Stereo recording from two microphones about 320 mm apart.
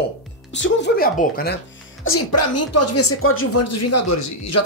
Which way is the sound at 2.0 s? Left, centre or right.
Left.